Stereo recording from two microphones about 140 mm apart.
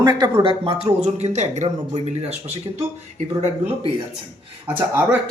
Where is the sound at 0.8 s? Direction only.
50° right (ahead or behind).